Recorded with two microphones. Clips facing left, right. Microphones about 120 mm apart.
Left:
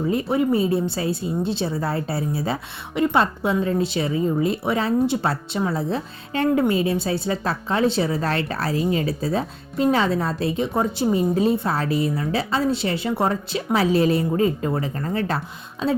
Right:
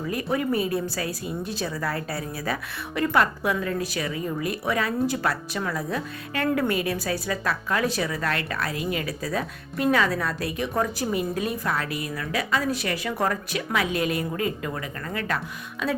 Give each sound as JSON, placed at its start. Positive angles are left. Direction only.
{"t": 0.0, "sound": "a woman's voice", "side_deg": 25}